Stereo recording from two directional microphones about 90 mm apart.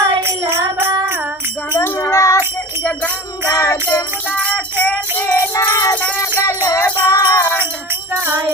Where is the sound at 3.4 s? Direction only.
35° left (ahead or behind).